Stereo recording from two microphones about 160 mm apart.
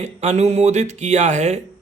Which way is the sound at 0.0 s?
45° right (ahead or behind).